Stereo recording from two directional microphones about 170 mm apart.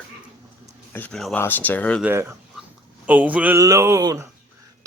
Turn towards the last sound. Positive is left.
turn(degrees=-20)  # may be behind; listen again after turning